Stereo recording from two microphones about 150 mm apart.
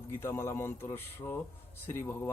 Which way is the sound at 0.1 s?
15° left (ahead or behind).